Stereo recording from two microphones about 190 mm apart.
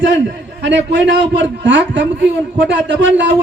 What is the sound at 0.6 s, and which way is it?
A man's voice, 70° right (ahead or behind).